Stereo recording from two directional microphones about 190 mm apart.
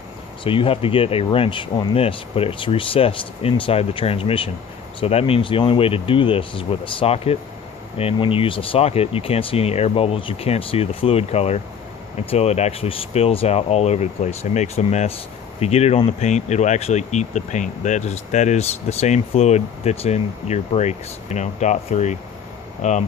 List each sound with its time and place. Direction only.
0.4 s speech: 30° left (ahead or behind)